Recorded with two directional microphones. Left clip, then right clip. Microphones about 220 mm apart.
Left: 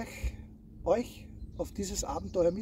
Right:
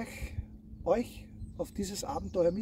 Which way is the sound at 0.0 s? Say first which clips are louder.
Even; centre (ahead or behind).